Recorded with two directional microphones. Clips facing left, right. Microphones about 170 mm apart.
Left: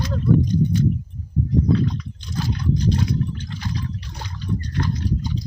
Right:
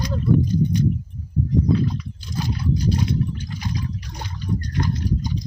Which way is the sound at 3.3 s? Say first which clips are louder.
Right 1 dB; 10° right (ahead or behind).